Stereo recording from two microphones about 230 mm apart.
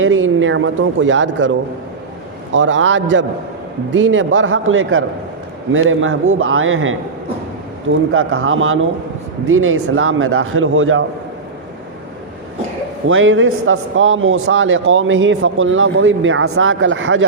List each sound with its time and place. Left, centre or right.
0.0 s a man's voice: right
8.1 s a man's voice: right
13.1 s a man's voice: right